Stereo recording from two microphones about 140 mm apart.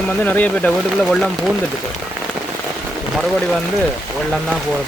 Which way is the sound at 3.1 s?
Centre (ahead or behind).